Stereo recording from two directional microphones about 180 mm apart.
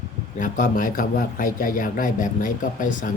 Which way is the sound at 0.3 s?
45° left (ahead or behind).